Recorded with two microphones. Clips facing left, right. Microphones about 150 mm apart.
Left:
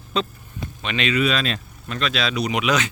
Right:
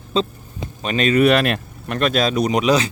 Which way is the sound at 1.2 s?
60° right (ahead or behind).